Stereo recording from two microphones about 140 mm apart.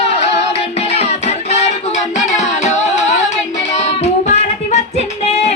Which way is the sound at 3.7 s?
50° left (ahead or behind).